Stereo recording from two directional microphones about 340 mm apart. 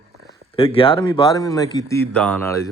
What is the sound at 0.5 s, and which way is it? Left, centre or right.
Speech, centre.